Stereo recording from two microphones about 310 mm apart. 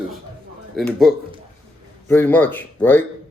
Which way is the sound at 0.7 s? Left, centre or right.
Centre.